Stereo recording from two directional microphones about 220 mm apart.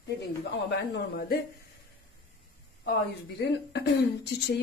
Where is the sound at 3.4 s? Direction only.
50° left (ahead or behind).